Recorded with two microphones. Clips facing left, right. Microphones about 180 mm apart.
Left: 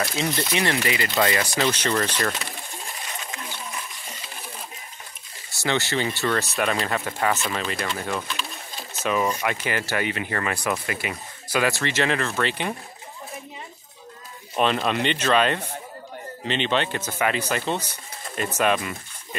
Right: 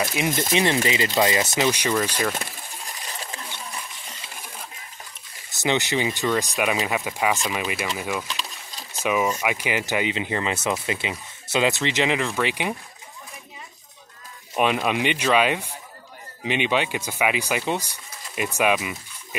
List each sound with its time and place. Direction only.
0.0 s speech: 20° right (ahead or behind)
5.5 s speech: 20° right (ahead or behind)
14.5 s speech: 10° right (ahead or behind)